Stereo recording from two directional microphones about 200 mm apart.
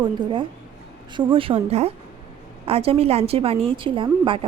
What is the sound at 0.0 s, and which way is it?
A woman's voice, 25° right (ahead or behind).